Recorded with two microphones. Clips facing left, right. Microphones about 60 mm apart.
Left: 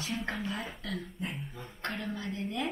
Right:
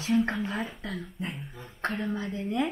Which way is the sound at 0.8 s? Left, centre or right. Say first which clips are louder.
Right 2 dB; right.